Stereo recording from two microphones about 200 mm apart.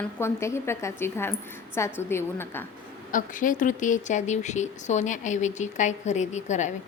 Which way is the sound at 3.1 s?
40° left (ahead or behind).